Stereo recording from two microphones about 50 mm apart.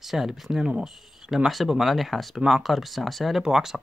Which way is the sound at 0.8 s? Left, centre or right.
Centre.